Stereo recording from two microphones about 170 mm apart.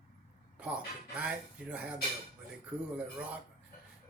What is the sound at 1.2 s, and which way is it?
Speech, 5° right (ahead or behind).